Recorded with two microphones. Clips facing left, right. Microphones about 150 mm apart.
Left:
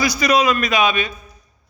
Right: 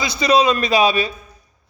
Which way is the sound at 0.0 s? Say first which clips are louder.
Right 1 dB; 25° right (ahead or behind).